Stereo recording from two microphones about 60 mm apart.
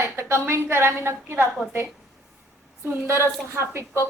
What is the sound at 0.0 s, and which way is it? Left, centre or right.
A woman's voice, right.